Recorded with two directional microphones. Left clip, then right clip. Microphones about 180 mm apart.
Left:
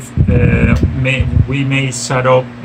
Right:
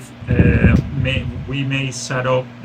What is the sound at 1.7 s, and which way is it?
Speech, 15° left (ahead or behind).